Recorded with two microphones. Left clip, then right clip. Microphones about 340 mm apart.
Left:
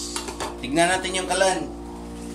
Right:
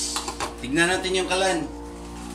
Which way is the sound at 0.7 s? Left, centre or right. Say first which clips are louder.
Left 1 dB; centre.